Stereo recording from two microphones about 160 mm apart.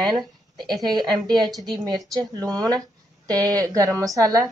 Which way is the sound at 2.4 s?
25° right (ahead or behind).